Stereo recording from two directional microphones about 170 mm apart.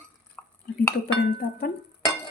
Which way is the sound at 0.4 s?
5° left (ahead or behind).